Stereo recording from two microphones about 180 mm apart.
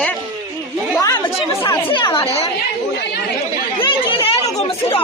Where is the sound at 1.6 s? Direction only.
25° left (ahead or behind).